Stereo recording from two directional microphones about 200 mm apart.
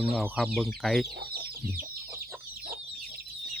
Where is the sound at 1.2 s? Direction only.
50° right (ahead or behind).